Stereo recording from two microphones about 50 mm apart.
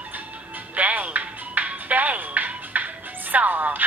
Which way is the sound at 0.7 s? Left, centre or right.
Right.